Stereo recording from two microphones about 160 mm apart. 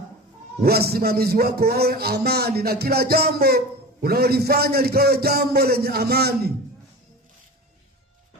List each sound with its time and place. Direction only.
0.6 s speech: 80° right